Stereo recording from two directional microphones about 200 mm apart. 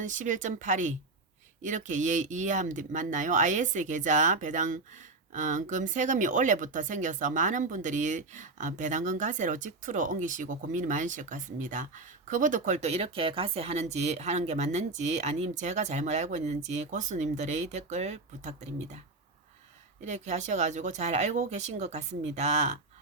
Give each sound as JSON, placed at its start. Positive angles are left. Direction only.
{"t": 0.0, "sound": "speech", "side_deg": -40}
{"t": 20.1, "sound": "speech", "side_deg": -35}